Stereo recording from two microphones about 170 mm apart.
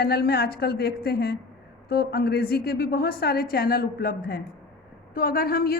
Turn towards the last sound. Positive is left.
turn(degrees=60)  # may be behind; listen again after turning